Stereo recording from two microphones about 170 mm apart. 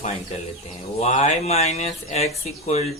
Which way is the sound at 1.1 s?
40° left (ahead or behind).